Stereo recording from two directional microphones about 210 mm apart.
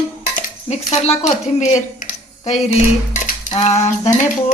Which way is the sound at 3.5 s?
30° left (ahead or behind).